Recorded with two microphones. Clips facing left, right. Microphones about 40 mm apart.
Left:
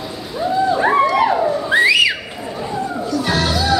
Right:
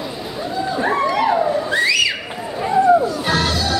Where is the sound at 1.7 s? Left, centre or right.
Left.